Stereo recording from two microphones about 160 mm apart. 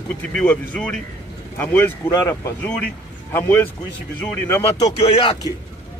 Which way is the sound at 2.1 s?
20° left (ahead or behind).